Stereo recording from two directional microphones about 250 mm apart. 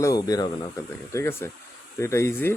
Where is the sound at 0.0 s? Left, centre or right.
Centre.